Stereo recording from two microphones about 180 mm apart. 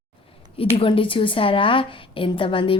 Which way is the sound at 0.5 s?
30° left (ahead or behind).